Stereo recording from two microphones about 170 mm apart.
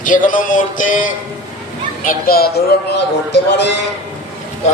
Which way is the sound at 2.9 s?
90° left.